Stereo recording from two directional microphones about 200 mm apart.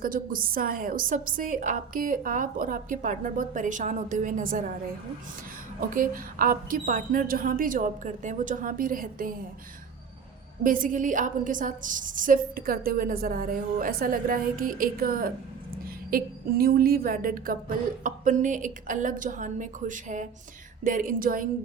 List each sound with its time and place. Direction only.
0.0 s a woman's voice: 45° right (ahead or behind)
5.9 s a woman's voice: 45° right (ahead or behind)
10.6 s a woman's voice: 40° right (ahead or behind)